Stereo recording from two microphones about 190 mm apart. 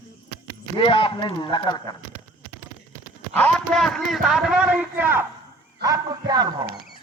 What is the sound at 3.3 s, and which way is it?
A man's voice, 5° left (ahead or behind).